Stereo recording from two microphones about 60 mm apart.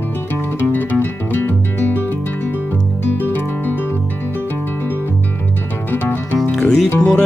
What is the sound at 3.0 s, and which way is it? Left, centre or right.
Music, left.